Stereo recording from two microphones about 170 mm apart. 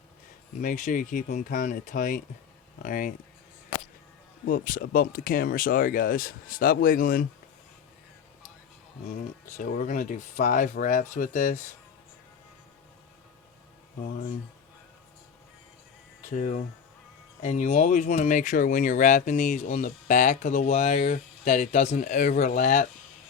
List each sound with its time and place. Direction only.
0.6 s speech: 50° left (ahead or behind)
4.4 s speech: 55° left (ahead or behind)
9.5 s speech: 50° left (ahead or behind)
16.3 s speech: 45° left (ahead or behind)